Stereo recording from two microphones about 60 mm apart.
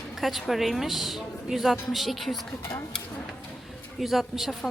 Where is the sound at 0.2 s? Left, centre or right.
Centre.